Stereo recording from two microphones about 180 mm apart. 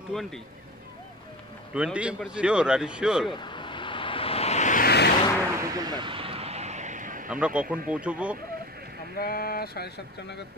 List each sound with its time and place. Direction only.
0.1 s speech: 5° left (ahead or behind)
1.7 s speech: 5° right (ahead or behind)
3.3 s a sound: 25° left (ahead or behind); by 4.8 s 40° left (ahead or behind)
4.8 s vehicle: 65° left (ahead or behind)
5.6 s vehicle: 20° right (ahead or behind); by 7.2 s 45° right (ahead or behind)
7.2 s speech: 5° right (ahead or behind)
9.1 s speech: 55° left (ahead or behind)